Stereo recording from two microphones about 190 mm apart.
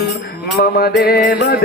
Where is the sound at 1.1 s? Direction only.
55° left (ahead or behind).